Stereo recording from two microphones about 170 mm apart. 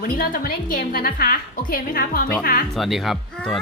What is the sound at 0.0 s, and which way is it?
Speech, 60° left (ahead or behind).